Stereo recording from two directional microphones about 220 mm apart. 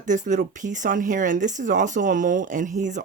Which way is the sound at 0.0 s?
35° right (ahead or behind).